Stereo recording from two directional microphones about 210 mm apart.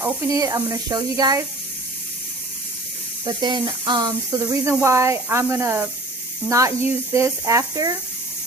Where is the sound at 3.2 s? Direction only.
20° right (ahead or behind).